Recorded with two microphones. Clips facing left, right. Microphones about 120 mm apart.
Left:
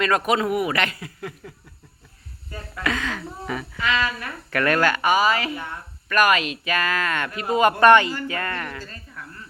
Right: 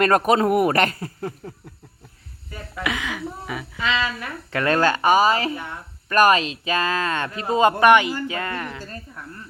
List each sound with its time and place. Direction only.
0.0 s a man's voice: 45° right (ahead or behind)
2.5 s speech: 15° right (ahead or behind)
3.8 s speech: 20° right (ahead or behind)
7.8 s speech: 10° right (ahead or behind)